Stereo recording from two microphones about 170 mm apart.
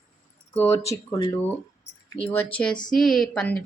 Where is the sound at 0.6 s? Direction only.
15° left (ahead or behind).